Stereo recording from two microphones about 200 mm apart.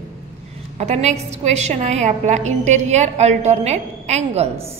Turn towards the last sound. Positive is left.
turn(degrees=-30)  # may be behind; listen again after turning